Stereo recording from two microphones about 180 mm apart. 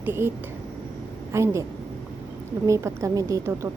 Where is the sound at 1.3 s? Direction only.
15° right (ahead or behind).